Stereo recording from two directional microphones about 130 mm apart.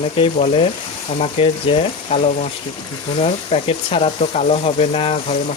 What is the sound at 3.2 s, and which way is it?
Speech, 50° left (ahead or behind).